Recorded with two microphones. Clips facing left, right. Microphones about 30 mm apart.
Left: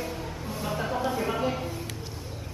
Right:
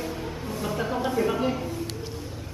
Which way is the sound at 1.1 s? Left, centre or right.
Centre.